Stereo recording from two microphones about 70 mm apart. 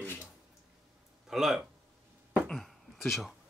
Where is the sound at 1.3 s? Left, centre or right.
Centre.